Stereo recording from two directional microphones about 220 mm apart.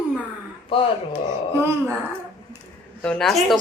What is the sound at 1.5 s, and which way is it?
Speech, 10° right (ahead or behind).